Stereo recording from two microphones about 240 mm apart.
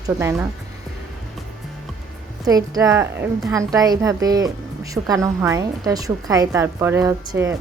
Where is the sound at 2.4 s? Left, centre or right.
Centre.